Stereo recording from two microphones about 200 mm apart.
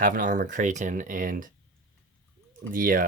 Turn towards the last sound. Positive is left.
turn(degrees=-45)  # may be behind; listen again after turning